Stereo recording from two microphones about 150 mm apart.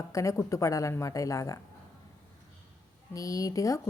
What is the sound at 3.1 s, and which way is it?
Speech, 20° left (ahead or behind).